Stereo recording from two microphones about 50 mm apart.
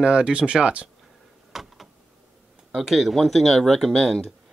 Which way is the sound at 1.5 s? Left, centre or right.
Centre.